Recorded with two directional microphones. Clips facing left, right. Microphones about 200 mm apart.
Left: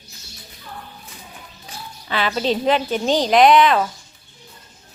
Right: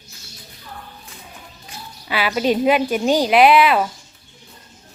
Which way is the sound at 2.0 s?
10° right (ahead or behind).